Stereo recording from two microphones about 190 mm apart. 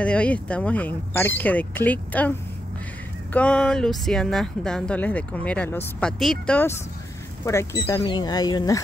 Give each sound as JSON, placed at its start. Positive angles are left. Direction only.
{"t": 0.0, "sound": "speech", "side_deg": 5}
{"t": 3.3, "sound": "speech", "side_deg": 5}
{"t": 7.4, "sound": "speech", "side_deg": 15}